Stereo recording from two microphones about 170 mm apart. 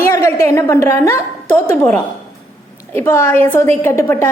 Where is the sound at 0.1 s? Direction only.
15° left (ahead or behind).